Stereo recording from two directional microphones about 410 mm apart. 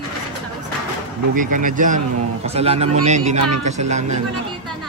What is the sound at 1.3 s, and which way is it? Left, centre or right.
Speech, centre.